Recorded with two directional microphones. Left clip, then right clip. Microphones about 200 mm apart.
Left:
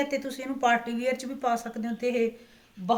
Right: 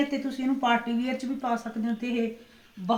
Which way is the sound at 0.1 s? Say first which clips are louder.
Right 2 dB; 45° left (ahead or behind).